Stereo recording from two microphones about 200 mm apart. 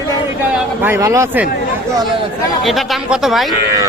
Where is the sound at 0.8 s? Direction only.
15° right (ahead or behind).